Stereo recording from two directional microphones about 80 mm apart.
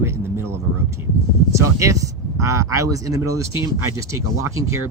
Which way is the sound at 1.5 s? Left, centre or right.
Right.